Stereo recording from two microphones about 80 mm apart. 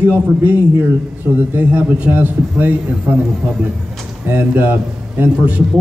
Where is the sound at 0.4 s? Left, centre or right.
Right.